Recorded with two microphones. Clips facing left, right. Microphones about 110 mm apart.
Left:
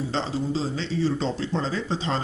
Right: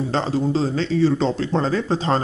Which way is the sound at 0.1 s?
55° right (ahead or behind).